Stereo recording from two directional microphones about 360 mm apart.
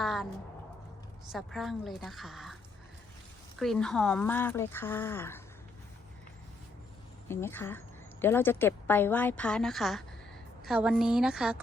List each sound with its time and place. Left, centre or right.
0.0 s speech: centre
1.3 s a woman's voice: centre
3.6 s a woman's voice: centre
7.3 s a woman's voice: centre